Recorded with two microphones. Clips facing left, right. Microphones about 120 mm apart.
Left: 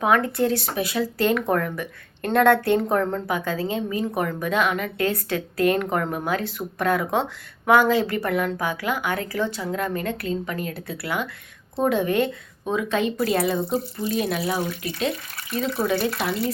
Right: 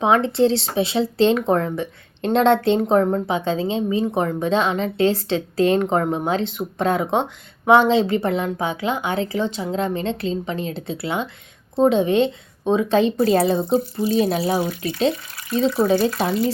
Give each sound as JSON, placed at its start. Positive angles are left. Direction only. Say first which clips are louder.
{"t": 0.0, "sound": "speech", "louder": "right 4 dB", "side_deg": -25}